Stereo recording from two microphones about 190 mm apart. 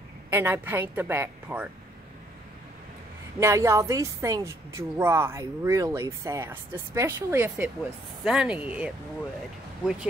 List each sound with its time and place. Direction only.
0.3 s a woman's voice: 10° right (ahead or behind)
3.3 s a woman's voice: 15° right (ahead or behind)